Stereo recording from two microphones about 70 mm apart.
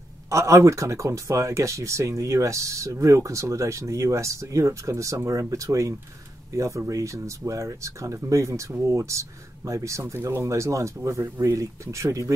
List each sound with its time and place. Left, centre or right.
0.3 s speech: right